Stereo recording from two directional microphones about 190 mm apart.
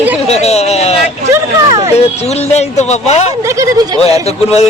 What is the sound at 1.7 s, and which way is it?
Speech, 20° right (ahead or behind).